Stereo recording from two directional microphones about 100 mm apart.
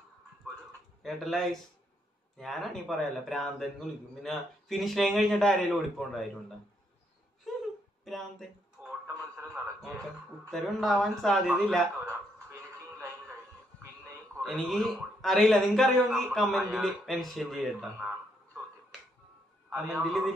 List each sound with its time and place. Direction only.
1.0 s a man's voice: centre (ahead or behind)
7.5 s wail: centre (ahead or behind)
8.0 s a man's voice: centre (ahead or behind)
8.8 s a sound: 25° right (ahead or behind)
10.5 s a man's voice: centre (ahead or behind)
14.4 s a man's voice: centre (ahead or behind)
19.9 s a man's voice: centre (ahead or behind)